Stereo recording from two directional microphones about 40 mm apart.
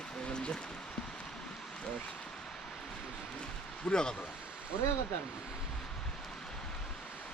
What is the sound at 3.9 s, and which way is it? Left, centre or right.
Speech, left.